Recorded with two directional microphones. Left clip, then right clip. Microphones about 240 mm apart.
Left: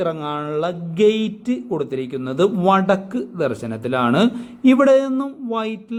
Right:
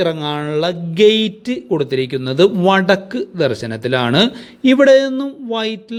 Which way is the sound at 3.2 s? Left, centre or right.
Centre.